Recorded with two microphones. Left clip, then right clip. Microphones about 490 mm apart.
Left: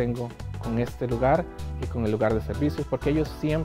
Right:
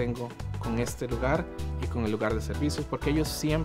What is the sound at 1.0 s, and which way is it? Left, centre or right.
Speech, left.